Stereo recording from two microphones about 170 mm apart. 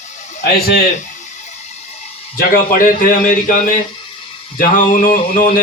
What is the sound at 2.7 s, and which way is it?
A man's voice, 50° left (ahead or behind).